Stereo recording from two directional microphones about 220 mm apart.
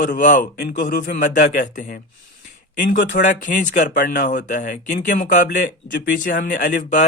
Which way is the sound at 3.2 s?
35° left (ahead or behind).